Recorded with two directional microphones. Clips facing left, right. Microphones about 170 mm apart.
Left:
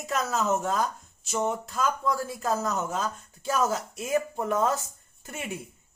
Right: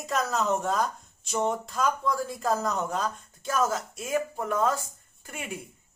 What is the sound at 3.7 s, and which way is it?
Speech, 15° left (ahead or behind).